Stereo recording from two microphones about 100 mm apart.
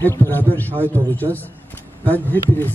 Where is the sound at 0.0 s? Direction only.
20° left (ahead or behind).